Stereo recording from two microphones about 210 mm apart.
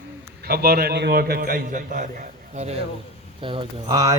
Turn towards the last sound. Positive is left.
turn(degrees=-20)  # may be behind; listen again after turning